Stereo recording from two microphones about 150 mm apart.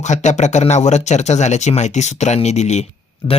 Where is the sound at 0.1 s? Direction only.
50° left (ahead or behind).